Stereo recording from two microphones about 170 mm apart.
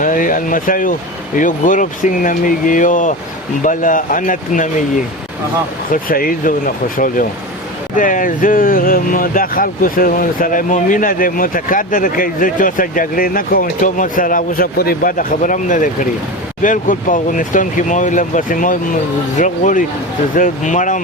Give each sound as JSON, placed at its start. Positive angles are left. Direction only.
{"t": 0.0, "sound": "speech", "side_deg": 50}
{"t": 5.9, "sound": "speech", "side_deg": 55}